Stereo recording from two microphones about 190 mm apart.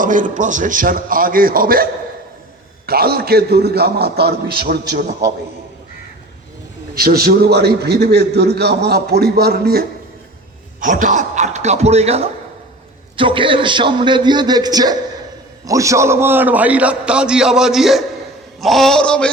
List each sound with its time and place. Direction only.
0.0 s a man's voice: 45° right (ahead or behind)
6.9 s a man's voice: 55° right (ahead or behind)
10.8 s a man's voice: 45° right (ahead or behind); by 19.3 s 5° left (ahead or behind)